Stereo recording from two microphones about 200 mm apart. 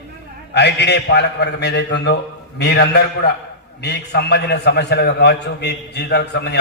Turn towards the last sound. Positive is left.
turn(degrees=55)  # may be behind; listen again after turning